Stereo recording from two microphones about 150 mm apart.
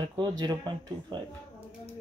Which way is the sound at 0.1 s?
30° right (ahead or behind).